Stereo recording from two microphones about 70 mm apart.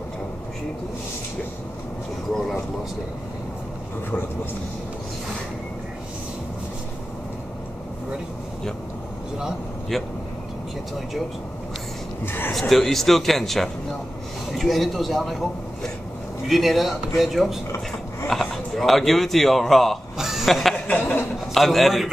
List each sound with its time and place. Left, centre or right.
12.3 s speech: left
12.5 s a man's voice: centre
20.7 s chuckle: centre
21.5 s a man's voice: centre